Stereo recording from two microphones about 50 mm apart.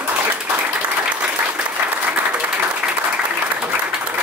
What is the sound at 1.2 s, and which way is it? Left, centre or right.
Applause, right.